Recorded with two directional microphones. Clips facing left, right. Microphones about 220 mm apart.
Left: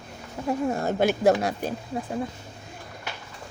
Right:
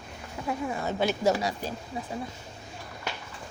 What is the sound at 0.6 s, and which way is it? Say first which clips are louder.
Speech: left 5 dB; 50° left (ahead or behind).